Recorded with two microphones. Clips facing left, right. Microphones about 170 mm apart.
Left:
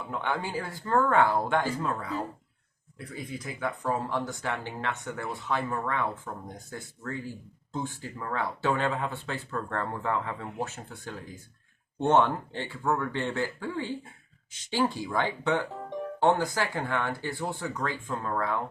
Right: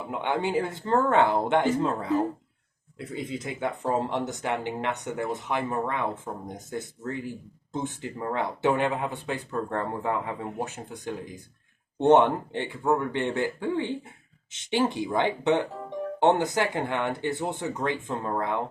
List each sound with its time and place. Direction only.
0.0 s speech: 20° right (ahead or behind)